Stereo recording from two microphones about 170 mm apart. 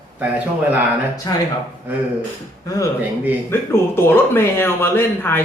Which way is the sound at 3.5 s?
15° left (ahead or behind).